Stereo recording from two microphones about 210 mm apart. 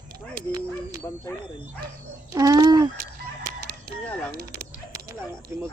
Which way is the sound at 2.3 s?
15° right (ahead or behind).